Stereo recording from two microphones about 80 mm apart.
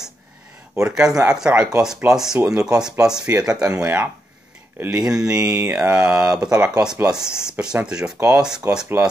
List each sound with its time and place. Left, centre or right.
0.7 s speech: centre
5.0 s speech: centre